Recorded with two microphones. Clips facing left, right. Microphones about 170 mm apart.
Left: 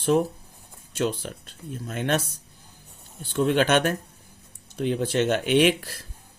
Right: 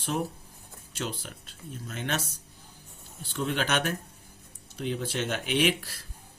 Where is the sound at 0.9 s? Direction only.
55° left (ahead or behind).